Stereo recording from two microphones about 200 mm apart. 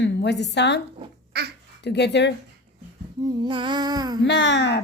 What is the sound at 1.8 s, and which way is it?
Speech, 60° left (ahead or behind).